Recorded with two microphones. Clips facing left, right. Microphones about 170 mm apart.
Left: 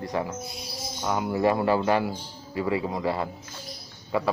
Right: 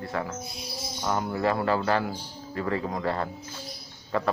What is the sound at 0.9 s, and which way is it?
A man's voice, 10° left (ahead or behind).